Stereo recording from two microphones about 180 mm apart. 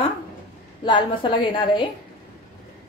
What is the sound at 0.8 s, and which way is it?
A woman's voice, 25° left (ahead or behind).